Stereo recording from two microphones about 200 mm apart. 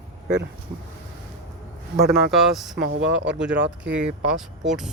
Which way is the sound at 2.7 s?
60° right (ahead or behind).